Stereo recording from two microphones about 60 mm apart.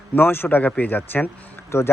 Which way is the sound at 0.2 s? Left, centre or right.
Left.